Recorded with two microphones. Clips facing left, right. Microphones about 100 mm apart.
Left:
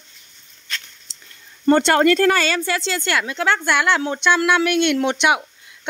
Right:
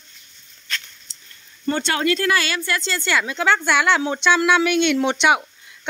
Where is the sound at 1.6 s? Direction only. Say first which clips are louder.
Left 7 dB; 60° left (ahead or behind).